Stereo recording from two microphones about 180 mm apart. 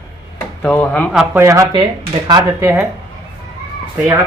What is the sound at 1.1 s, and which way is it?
Speech, 15° right (ahead or behind).